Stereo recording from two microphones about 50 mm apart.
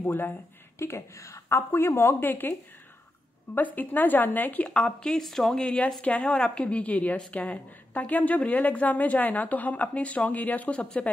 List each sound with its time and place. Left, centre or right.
0.0 s speech: left
0.7 s a woman's voice: left
3.5 s speech: left
4.6 s a woman's voice: centre
6.0 s a woman's voice: left